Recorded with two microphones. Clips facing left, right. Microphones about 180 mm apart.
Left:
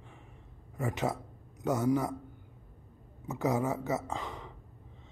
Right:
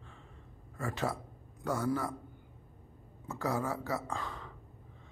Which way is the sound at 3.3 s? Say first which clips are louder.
Left 4 dB; 20° left (ahead or behind).